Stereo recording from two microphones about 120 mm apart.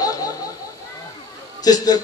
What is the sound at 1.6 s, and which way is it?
Speech, 30° left (ahead or behind).